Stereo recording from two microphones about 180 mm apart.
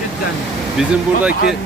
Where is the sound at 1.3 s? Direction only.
60° left (ahead or behind).